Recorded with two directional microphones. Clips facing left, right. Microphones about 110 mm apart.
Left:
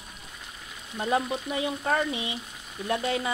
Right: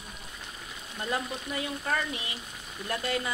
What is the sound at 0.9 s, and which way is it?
Speech, 20° left (ahead or behind).